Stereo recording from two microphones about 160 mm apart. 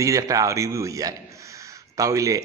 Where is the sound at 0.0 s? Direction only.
20° right (ahead or behind).